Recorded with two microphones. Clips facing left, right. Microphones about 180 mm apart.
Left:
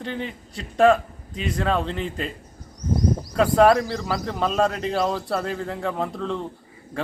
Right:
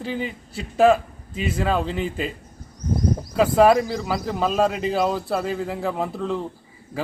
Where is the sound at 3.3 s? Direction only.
5° right (ahead or behind).